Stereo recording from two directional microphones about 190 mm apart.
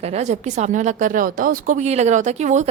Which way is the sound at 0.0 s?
35° right (ahead or behind).